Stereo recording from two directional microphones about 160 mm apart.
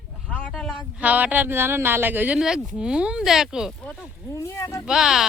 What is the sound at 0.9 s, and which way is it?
Speech, 10° right (ahead or behind).